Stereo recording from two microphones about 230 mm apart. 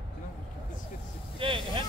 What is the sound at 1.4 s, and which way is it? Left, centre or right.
Speech, right.